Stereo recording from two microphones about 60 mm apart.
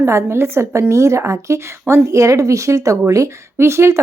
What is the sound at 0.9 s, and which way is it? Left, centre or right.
Speech, right.